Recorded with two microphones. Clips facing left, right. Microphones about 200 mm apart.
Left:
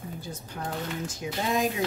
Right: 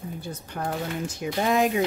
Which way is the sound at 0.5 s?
60° right (ahead or behind).